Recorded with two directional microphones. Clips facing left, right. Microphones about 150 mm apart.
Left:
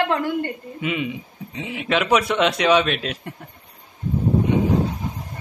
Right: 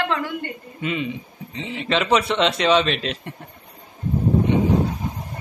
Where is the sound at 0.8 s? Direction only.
10° left (ahead or behind).